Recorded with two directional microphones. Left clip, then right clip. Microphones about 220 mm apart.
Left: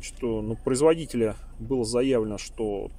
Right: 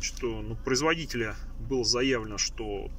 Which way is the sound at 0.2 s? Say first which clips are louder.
Left 5 dB; 20° left (ahead or behind).